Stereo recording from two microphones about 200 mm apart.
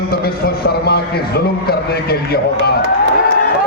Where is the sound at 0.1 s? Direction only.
50° left (ahead or behind).